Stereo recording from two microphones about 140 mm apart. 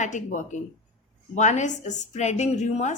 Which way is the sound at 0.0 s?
60° left (ahead or behind).